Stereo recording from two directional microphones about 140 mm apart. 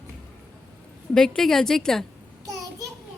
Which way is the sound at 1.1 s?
5° left (ahead or behind).